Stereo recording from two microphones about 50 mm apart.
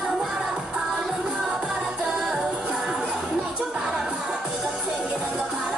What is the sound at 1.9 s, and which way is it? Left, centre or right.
Music, centre.